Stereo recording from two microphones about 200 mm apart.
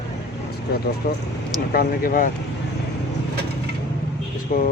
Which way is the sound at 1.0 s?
50° left (ahead or behind).